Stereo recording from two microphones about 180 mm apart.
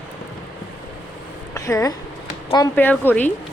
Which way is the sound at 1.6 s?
20° left (ahead or behind).